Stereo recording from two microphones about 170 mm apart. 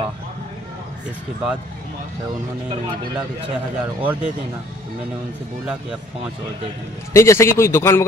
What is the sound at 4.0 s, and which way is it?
Speech, 10° right (ahead or behind).